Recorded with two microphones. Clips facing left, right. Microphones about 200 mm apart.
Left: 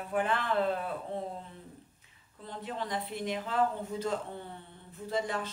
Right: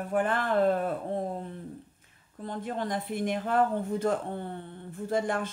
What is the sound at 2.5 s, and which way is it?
Speech, 50° right (ahead or behind).